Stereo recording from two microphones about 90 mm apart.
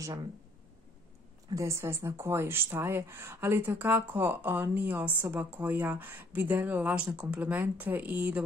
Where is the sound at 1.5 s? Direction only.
35° right (ahead or behind).